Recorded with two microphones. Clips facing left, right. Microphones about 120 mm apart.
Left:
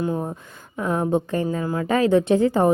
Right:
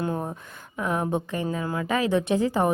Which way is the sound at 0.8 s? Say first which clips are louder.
Left 4 dB; 30° left (ahead or behind).